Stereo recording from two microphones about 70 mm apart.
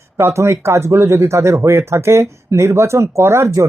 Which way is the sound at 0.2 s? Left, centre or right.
Right.